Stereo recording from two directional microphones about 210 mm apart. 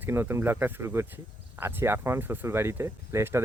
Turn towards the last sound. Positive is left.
turn(degrees=-10)  # may be behind; listen again after turning